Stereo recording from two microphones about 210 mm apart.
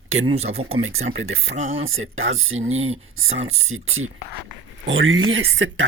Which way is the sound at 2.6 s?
30° right (ahead or behind).